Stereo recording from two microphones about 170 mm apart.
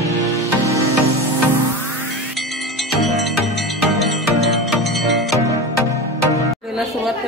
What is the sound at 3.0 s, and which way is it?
Music, centre (ahead or behind).